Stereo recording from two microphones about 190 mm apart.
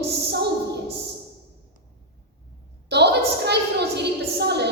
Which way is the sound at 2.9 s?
60° right (ahead or behind).